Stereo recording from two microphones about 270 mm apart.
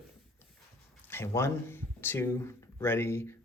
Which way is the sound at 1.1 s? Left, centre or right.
Centre.